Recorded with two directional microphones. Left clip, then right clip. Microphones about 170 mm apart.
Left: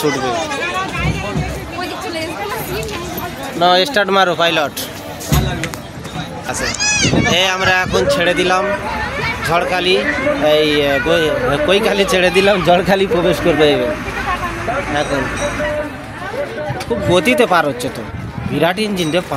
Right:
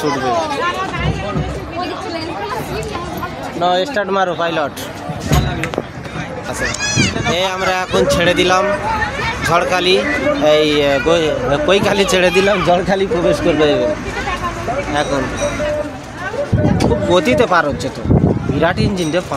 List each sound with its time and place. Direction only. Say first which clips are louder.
3.5 s speech: left 3 dB; 15° left (ahead or behind)
7.3 s speech: left 3 dB; 5° right (ahead or behind)
12.4 s a man's voice: left 2 dB; 20° left (ahead or behind)
13.6 s speech: left 1 dB; 5° left (ahead or behind)
17.1 s speech: left 1 dB; 15° left (ahead or behind)